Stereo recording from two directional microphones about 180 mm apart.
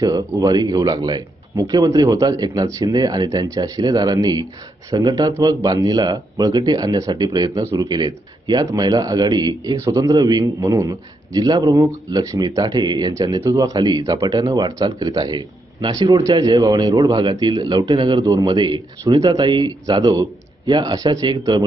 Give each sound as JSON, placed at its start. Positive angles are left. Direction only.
{"t": 0.0, "sound": "speech", "side_deg": -20}